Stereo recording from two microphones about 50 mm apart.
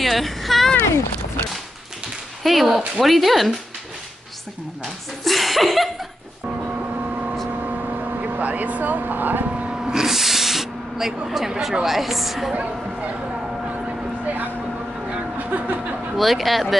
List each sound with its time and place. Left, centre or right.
0.0 s a sound: centre
2.4 s speech: centre
4.8 s speech: centre
7.6 s vehicle: right
9.5 s a sound: right
9.8 s a sound: centre
11.2 s speech: centre
12.5 s a woman's voice: right
14.2 s vehicle: right
15.3 s chuckle: right
16.2 s speech: centre